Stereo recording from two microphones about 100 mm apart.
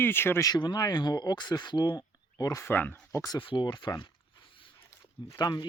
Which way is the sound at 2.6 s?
20° left (ahead or behind).